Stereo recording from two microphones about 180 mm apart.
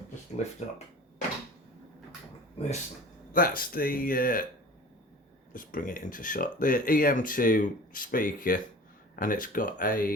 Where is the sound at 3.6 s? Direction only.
55° left (ahead or behind).